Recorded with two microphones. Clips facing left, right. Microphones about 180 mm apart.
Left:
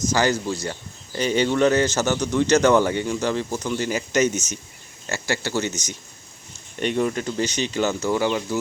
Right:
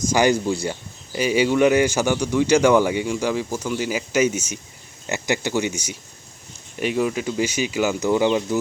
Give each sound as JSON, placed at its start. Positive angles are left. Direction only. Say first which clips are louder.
{"t": 0.0, "sound": "a man's voice", "louder": "right 3 dB", "side_deg": -15}